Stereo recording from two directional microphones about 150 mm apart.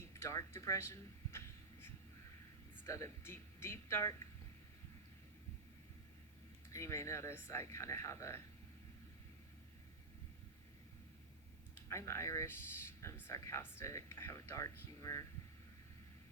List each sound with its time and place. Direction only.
0.1 s a sound: 20° left (ahead or behind)
2.8 s speech: 20° left (ahead or behind)
6.7 s speech: 20° left (ahead or behind)
11.7 s speech: 20° left (ahead or behind)